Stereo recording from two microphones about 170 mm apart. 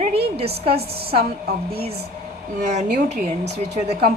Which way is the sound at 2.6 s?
40° right (ahead or behind).